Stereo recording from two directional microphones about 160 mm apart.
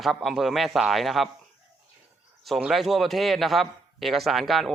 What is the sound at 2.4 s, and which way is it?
A man's voice, centre (ahead or behind).